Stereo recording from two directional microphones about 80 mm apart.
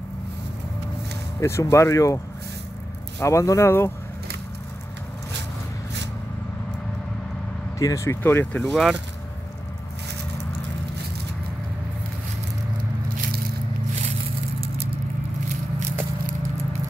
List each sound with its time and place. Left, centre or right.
1.4 s speech: left
7.8 s speech: left
8.2 s speech: left
8.5 s speech: centre